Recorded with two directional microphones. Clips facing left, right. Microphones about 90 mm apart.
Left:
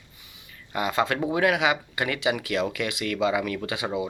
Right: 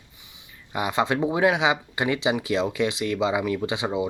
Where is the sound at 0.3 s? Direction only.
15° right (ahead or behind).